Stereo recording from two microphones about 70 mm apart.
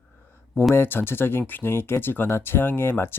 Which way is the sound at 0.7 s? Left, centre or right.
Left.